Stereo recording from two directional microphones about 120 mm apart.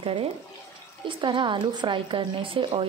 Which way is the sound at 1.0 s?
40° right (ahead or behind).